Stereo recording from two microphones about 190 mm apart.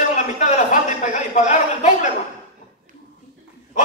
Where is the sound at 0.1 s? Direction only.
40° left (ahead or behind).